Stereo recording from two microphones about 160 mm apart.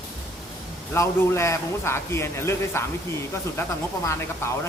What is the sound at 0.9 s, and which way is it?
Speech, 15° left (ahead or behind).